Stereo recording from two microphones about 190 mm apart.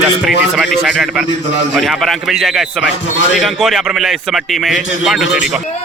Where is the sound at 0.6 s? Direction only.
Centre (ahead or behind).